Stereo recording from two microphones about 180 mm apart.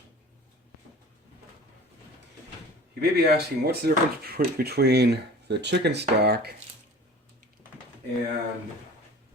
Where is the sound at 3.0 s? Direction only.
65° right (ahead or behind).